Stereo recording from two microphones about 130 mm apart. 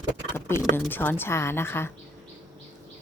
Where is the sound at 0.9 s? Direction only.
15° left (ahead or behind).